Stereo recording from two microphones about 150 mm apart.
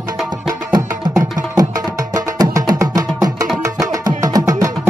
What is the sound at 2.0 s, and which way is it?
Music, 25° right (ahead or behind).